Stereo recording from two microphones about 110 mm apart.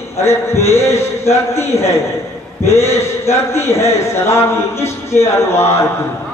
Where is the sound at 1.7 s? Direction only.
65° left (ahead or behind).